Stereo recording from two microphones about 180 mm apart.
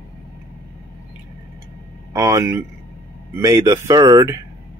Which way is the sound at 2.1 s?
15° right (ahead or behind).